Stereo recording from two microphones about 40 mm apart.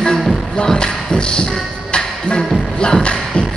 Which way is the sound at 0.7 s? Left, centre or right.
Left.